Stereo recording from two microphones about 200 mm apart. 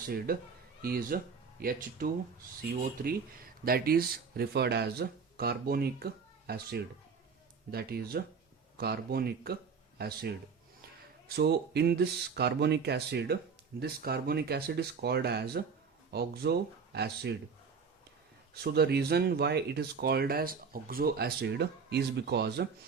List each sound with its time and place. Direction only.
0.3 s speech: 45° right (ahead or behind)
18.5 s speech: 50° right (ahead or behind)